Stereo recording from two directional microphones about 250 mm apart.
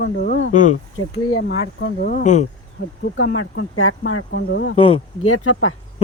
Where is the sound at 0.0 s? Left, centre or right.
Left.